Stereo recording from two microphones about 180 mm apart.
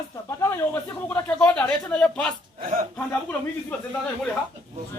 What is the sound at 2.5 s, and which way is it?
Speech, 50° right (ahead or behind).